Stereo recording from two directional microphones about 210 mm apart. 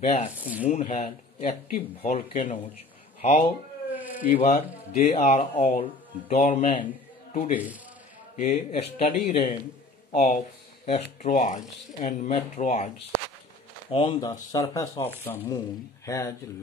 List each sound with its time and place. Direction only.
0.4 s speech: 5° right (ahead or behind)
0.7 s speech: 30° left (ahead or behind)
3.9 s a sound: 10° right (ahead or behind)
4.4 s speech: 30° left (ahead or behind)
8.5 s speech: 30° left (ahead or behind); by 16.3 s 15° left (ahead or behind)